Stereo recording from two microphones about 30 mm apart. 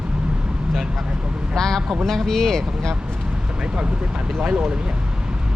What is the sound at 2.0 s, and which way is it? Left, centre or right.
Speech, centre.